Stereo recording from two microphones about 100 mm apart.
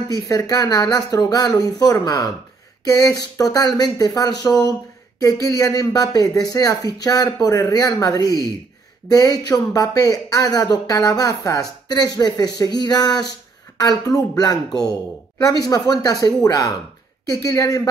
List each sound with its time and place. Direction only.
0.1 s speech: 40° left (ahead or behind)